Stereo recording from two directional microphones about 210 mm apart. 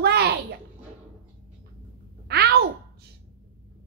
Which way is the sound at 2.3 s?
50° right (ahead or behind).